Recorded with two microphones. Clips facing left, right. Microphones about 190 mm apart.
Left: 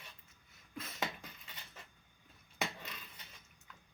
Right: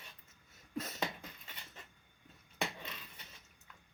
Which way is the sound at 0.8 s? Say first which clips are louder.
Right 6 dB; 40° right (ahead or behind).